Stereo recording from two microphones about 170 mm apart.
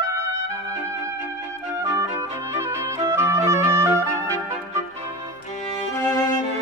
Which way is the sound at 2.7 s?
15° right (ahead or behind).